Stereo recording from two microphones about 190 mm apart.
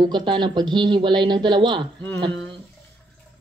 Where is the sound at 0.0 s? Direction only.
25° right (ahead or behind).